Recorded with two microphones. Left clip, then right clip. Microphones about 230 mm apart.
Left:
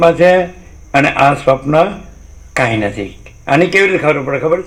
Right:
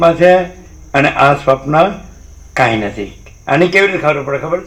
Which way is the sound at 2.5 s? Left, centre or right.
Left.